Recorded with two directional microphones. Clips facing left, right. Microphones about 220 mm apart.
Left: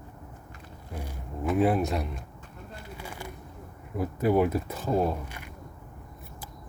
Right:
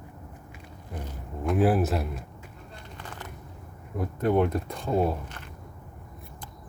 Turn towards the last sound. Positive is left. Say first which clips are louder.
# even
turn(degrees=10)  # may be behind; listen again after turning